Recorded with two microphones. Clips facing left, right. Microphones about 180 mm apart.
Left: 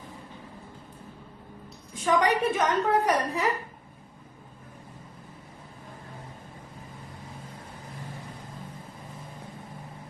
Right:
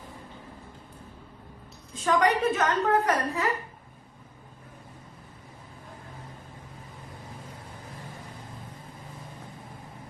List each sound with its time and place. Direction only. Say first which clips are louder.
1.9 s a woman's voice: even; 10° left (ahead or behind)